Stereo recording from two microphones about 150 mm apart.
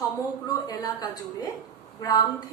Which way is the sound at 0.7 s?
25° left (ahead or behind).